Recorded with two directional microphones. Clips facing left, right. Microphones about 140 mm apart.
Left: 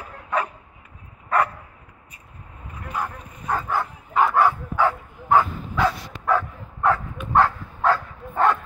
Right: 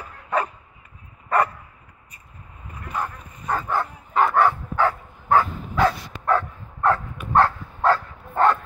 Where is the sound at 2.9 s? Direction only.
10° left (ahead or behind).